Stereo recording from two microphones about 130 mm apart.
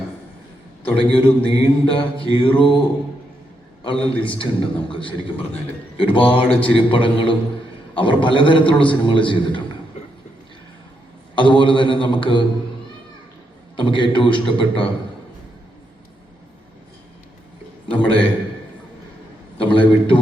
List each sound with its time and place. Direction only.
0.9 s a man's voice: 45° left (ahead or behind)
3.8 s a man's voice: 45° left (ahead or behind)
11.3 s a man's voice: 40° left (ahead or behind)
13.7 s a man's voice: 40° left (ahead or behind)
17.8 s a man's voice: 45° left (ahead or behind)
19.5 s a man's voice: 40° left (ahead or behind)